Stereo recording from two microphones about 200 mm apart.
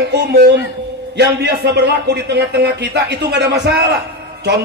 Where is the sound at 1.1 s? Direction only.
60° right (ahead or behind).